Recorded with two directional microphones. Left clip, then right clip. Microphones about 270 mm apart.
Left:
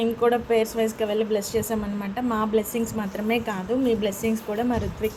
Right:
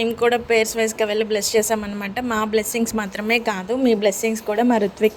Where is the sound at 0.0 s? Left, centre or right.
Right.